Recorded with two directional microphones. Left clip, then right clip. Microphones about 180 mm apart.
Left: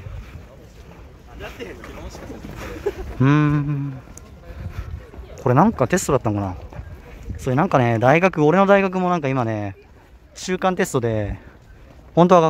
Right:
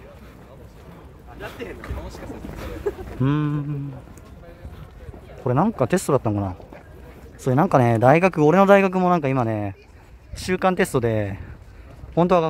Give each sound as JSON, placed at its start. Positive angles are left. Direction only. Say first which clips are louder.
{"t": 1.6, "sound": "speech", "louder": "even", "side_deg": 0}
{"t": 3.2, "sound": "speech", "louder": "left 8 dB", "side_deg": 20}
{"t": 5.3, "sound": "speech", "louder": "left 5 dB", "side_deg": 15}
{"t": 5.8, "sound": "speech", "louder": "left 1 dB", "side_deg": 0}
{"t": 7.5, "sound": "speech", "louder": "even", "side_deg": 0}
{"t": 12.2, "sound": "speech", "louder": "left 5 dB", "side_deg": 20}